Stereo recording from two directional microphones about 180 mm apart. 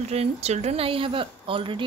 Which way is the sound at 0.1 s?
35° right (ahead or behind).